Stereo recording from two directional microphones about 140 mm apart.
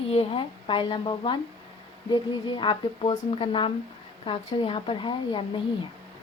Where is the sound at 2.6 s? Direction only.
35° left (ahead or behind).